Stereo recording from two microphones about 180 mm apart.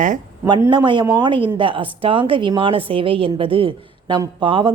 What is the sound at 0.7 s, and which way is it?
A woman's voice, 25° right (ahead or behind).